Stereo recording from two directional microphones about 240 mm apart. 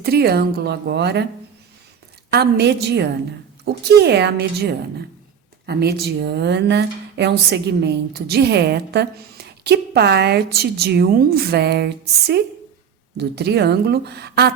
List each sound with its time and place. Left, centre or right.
0.0 s a woman's voice: right
2.3 s a woman's voice: right